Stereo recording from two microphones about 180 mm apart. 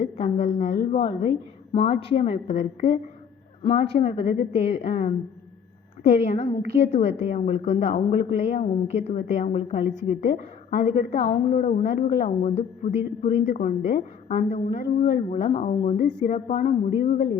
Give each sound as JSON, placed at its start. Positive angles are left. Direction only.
{"t": 0.0, "sound": "a woman's voice", "side_deg": 35}